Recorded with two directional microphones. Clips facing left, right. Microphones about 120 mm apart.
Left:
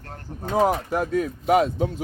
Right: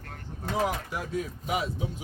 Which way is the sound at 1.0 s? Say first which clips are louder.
Left 9 dB; 75° left (ahead or behind).